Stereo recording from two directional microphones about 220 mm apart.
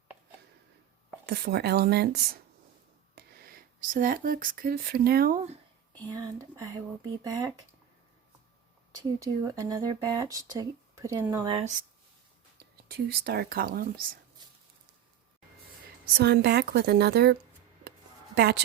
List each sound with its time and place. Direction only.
1.3 s a woman's voice: 50° right (ahead or behind)
6.1 s speech: 15° right (ahead or behind)
9.0 s speech: 15° right (ahead or behind)
11.4 s speech: 25° right (ahead or behind)
12.5 s speech: 45° right (ahead or behind)
16.1 s a woman's voice: 45° right (ahead or behind)
18.3 s a woman's voice: 50° right (ahead or behind)